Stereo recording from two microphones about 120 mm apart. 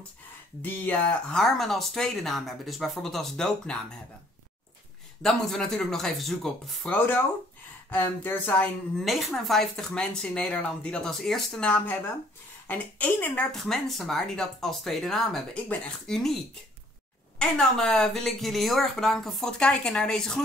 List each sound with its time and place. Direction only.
0.6 s speech: 15° left (ahead or behind)
5.2 s speech: 5° left (ahead or behind)
7.9 s speech: 15° left (ahead or behind)
8.9 s speech: centre (ahead or behind)
17.4 s speech: 5° left (ahead or behind)